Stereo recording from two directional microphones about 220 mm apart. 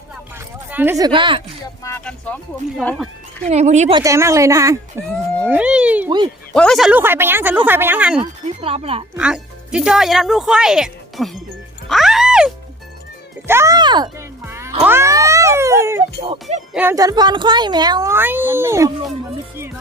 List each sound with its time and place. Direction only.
0.3 s a sound: 10° right (ahead or behind)
1.8 s speech: 10° left (ahead or behind)
3.5 s speech: 30° right (ahead or behind)
4.0 s speech: 15° right (ahead or behind)
5.5 s a sound: 5° right (ahead or behind)
6.5 s speech: 5° left (ahead or behind)
8.2 s speech: 25° right (ahead or behind)
9.1 s speech: 5° right (ahead or behind)
11.9 s music: centre (ahead or behind)
13.5 s a child's voice: 15° right (ahead or behind)
14.8 s cat: 10° right (ahead or behind)
16.2 s speech: 25° right (ahead or behind)
16.7 s speech: 10° right (ahead or behind)